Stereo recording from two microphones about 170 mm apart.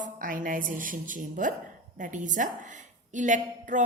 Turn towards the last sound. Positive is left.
turn(degrees=-45)  # may be behind; listen again after turning